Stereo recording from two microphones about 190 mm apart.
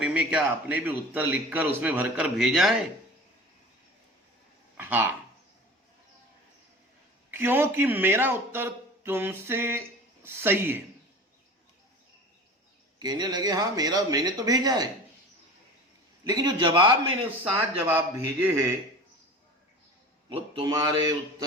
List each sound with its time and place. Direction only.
0.0 s a man's voice: 5° right (ahead or behind)
4.8 s speech: 10° right (ahead or behind)
7.3 s speech: 10° right (ahead or behind)
13.0 s speech: 20° right (ahead or behind)
16.2 s speech: 20° right (ahead or behind)
17.5 s speech: 10° right (ahead or behind)
20.3 s speech: 25° right (ahead or behind)